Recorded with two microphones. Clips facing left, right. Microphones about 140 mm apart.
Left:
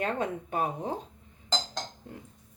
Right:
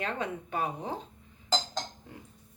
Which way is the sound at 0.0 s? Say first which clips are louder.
Left 3 dB; 45° left (ahead or behind).